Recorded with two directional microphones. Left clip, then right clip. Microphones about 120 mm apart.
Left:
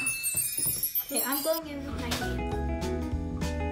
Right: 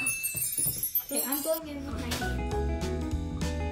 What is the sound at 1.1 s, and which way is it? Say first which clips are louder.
Wind chime: left 2 dB; centre (ahead or behind).